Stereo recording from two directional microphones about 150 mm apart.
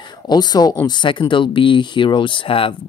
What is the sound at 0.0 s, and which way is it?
Speech, 30° left (ahead or behind).